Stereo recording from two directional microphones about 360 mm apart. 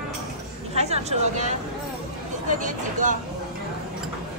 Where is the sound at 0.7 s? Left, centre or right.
Centre.